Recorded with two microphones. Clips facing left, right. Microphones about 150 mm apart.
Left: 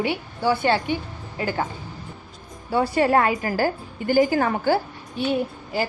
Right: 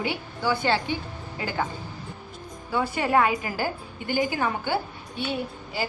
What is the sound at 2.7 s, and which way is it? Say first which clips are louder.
A woman's voice: left 4 dB; 35° left (ahead or behind).